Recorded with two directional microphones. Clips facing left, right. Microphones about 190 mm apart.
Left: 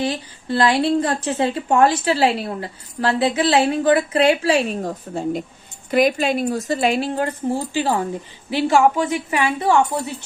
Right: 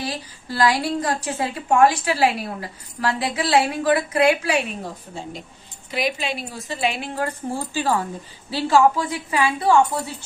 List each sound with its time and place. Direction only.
0.0 s a woman's voice: 25° left (ahead or behind)
4.8 s speech: 50° left (ahead or behind)
7.2 s a woman's voice: 15° left (ahead or behind)